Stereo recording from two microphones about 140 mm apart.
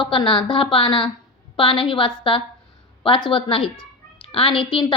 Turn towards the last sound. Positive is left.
turn(degrees=35)  # may be behind; listen again after turning